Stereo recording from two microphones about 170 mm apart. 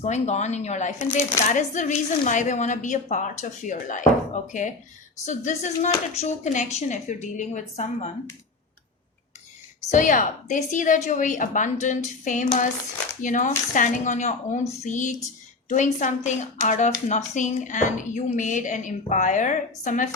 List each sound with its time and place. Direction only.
0.0 s speech: 40° left (ahead or behind)
9.9 s speech: 50° left (ahead or behind)